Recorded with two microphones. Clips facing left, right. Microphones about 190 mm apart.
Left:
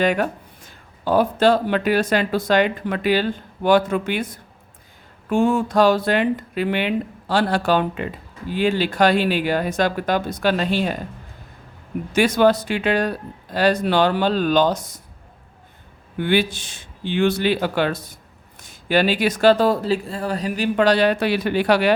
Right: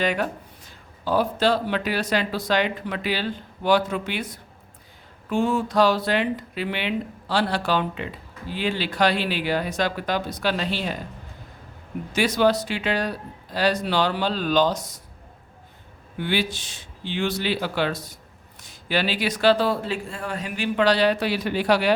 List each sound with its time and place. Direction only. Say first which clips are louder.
0.0 s speech: left 5 dB; 50° left (ahead or behind)
12.1 s speech: left 4 dB; 50° left (ahead or behind)
16.1 s speech: left 6 dB; 55° left (ahead or behind)